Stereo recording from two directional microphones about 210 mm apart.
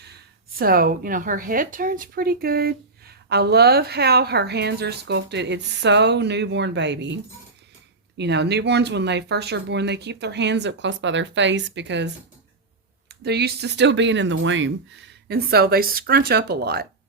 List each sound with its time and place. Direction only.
0.0 s speech: 50° right (ahead or behind)
8.2 s speech: 55° right (ahead or behind)